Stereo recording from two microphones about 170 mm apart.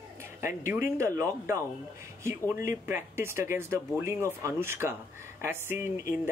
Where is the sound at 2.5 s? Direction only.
50° left (ahead or behind).